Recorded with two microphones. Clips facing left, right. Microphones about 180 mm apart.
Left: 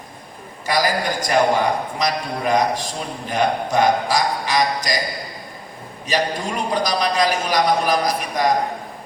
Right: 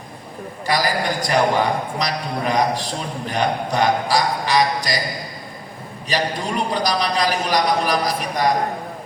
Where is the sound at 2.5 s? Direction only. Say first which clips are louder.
Left 1 dB; 45° left (ahead or behind).